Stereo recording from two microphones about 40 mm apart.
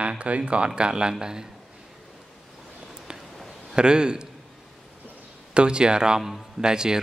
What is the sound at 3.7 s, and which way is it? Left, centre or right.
Speech, right.